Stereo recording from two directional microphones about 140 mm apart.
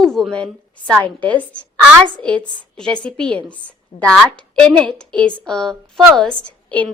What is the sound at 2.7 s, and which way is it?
Speech, 5° left (ahead or behind).